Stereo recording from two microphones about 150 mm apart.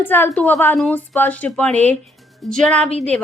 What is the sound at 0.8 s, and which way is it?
A woman's voice, 5° left (ahead or behind).